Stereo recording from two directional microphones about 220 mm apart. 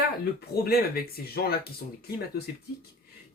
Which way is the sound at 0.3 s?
45° left (ahead or behind).